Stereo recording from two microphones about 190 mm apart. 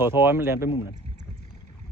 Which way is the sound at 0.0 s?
10° right (ahead or behind).